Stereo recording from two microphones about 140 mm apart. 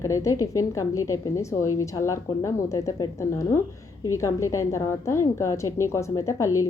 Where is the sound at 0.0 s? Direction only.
20° left (ahead or behind).